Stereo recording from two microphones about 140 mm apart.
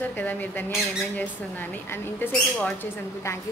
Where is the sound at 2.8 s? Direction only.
20° left (ahead or behind).